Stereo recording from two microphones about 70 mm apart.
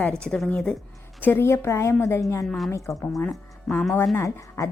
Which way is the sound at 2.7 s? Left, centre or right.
Left.